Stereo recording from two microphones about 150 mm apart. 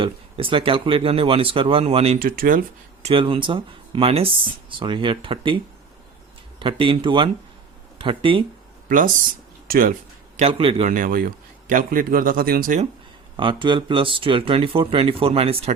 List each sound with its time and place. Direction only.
0.0 s speech: 35° right (ahead or behind)
2.1 s speech: 70° right (ahead or behind)
3.0 s speech: 35° right (ahead or behind)
6.6 s speech: 35° right (ahead or behind)
9.6 s speech: 70° right (ahead or behind)
10.3 s speech: 40° right (ahead or behind)
10.8 s speech: 65° right (ahead or behind)
13.3 s speech: 35° right (ahead or behind)